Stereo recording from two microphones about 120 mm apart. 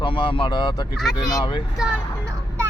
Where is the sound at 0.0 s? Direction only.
45° left (ahead or behind).